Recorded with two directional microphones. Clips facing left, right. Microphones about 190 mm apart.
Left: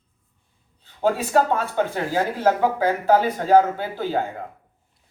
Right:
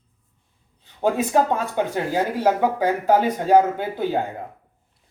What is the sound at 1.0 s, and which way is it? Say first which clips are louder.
Speech: even; 15° right (ahead or behind).